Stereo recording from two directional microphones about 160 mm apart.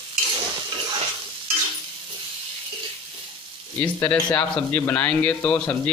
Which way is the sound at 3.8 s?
15° left (ahead or behind).